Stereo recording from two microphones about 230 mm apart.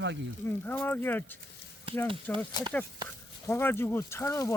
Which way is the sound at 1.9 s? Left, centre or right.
Right.